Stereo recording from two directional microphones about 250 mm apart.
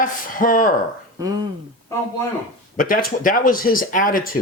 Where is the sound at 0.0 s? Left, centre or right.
Left.